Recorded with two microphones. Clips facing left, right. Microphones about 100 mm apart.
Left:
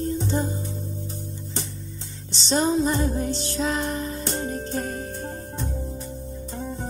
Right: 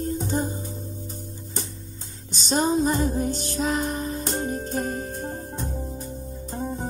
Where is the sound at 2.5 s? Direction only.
45° right (ahead or behind).